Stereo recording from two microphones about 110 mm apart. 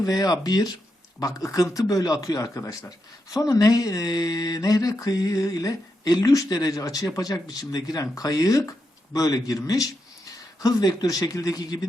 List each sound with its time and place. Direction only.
0.0 s speech: 35° left (ahead or behind)